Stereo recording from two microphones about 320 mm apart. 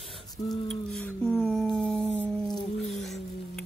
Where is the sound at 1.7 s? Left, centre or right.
Centre.